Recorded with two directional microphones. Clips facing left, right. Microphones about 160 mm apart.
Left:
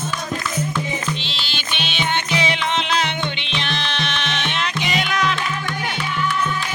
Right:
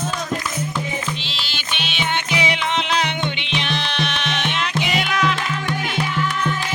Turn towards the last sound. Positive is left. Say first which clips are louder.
# right 1 dB
turn(degrees=-5)  # may be behind; listen again after turning